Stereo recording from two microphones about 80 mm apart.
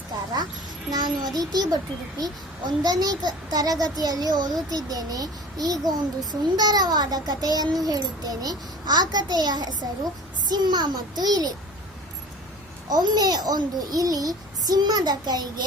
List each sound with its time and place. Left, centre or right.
0.9 s a child's voice: right
12.9 s a child's voice: right